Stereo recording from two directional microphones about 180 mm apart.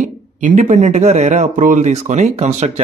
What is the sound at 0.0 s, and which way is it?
A man's voice, 45° right (ahead or behind).